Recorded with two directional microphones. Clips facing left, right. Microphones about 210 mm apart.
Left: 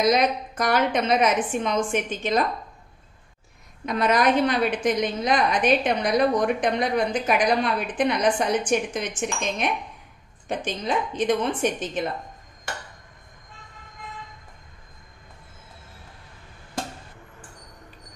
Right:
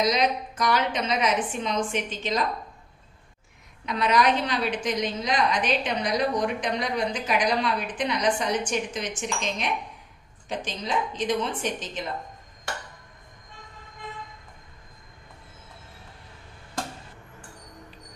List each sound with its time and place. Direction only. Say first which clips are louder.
0.0 s a woman's voice: left 3 dB; 50° left (ahead or behind)
3.8 s a woman's voice: left 2 dB; 50° left (ahead or behind)